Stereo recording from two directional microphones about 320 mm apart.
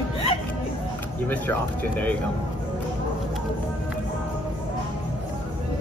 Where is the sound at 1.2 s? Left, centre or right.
Centre.